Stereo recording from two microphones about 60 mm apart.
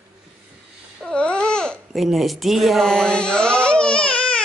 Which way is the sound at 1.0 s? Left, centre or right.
Centre.